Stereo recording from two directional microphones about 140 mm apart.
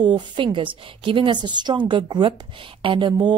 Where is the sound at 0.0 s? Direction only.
35° right (ahead or behind).